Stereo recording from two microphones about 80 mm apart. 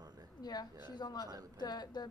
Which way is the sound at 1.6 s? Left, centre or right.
Left.